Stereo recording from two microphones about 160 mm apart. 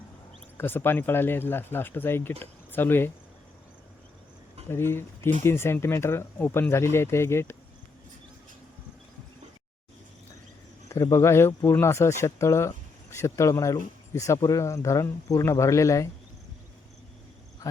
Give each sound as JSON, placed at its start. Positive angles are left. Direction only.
{"t": 0.5, "sound": "speech", "side_deg": 10}
{"t": 4.7, "sound": "speech", "side_deg": 15}
{"t": 10.8, "sound": "speech", "side_deg": 20}